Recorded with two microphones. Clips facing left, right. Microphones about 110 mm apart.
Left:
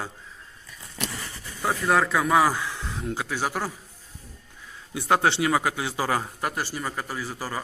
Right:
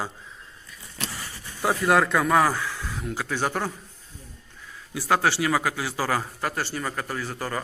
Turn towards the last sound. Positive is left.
turn(degrees=10)  # may be behind; listen again after turning